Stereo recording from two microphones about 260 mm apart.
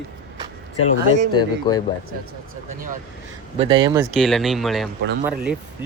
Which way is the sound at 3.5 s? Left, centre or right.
Right.